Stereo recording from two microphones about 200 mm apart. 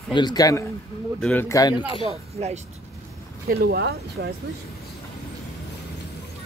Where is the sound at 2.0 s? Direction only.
30° right (ahead or behind).